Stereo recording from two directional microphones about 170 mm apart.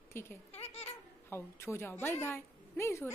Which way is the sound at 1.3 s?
15° left (ahead or behind).